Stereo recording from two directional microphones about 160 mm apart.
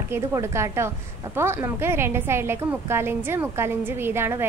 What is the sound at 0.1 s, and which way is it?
A woman's voice, 15° right (ahead or behind).